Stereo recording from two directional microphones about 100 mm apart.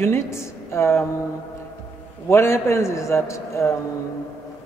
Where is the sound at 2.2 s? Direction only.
25° left (ahead or behind).